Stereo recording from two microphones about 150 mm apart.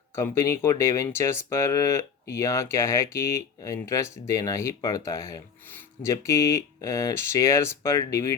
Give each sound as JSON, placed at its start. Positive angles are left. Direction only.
{"t": 0.2, "sound": "speech", "side_deg": 20}